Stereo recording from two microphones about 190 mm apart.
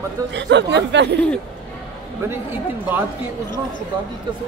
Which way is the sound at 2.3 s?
10° right (ahead or behind).